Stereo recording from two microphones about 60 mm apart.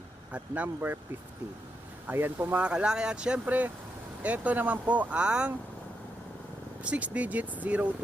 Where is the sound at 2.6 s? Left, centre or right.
Centre.